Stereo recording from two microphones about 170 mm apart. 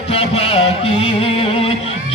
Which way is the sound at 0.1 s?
35° left (ahead or behind).